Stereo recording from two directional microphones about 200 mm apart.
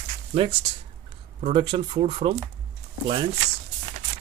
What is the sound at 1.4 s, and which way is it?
Speech, 25° right (ahead or behind).